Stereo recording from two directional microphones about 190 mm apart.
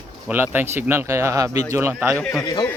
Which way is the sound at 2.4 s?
20° left (ahead or behind).